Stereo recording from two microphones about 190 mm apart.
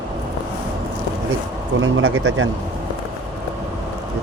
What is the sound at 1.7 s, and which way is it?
Speech, 90° right.